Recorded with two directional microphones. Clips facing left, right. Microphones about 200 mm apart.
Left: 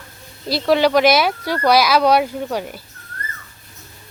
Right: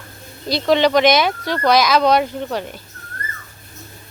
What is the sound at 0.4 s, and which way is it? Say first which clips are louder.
A child's voice: even; 5° left (ahead or behind).